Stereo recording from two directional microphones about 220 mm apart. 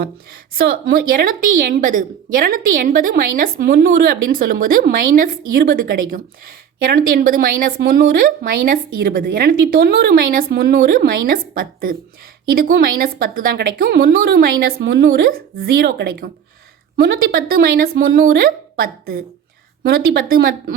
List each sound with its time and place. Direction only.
0.6 s a woman's voice: 45° right (ahead or behind)